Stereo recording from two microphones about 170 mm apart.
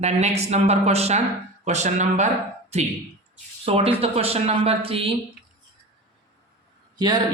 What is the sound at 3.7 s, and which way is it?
A man's voice, 35° right (ahead or behind).